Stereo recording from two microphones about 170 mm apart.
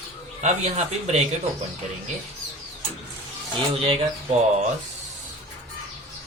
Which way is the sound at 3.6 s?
35° right (ahead or behind).